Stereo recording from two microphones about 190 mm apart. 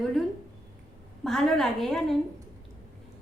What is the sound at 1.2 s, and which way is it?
Speech, centre (ahead or behind).